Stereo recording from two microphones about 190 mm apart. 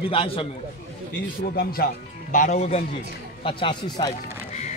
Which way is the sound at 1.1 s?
55° left (ahead or behind).